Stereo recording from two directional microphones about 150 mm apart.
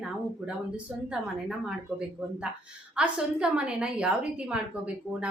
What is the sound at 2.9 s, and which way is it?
A woman's voice, 5° right (ahead or behind).